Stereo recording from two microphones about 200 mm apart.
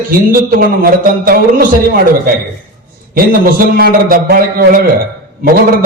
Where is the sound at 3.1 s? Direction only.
45° right (ahead or behind).